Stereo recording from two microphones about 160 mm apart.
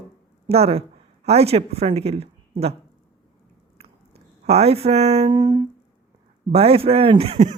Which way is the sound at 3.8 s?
40° right (ahead or behind).